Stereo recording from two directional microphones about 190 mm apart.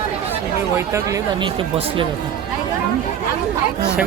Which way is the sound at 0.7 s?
15° right (ahead or behind).